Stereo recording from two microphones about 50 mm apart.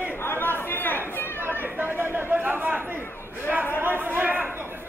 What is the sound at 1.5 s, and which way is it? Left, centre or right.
Chatter, right.